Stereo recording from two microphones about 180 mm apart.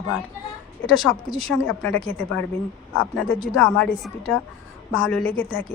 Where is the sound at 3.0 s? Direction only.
5° left (ahead or behind).